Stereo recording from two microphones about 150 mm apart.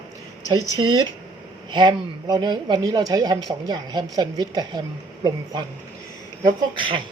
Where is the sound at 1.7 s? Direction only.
30° right (ahead or behind).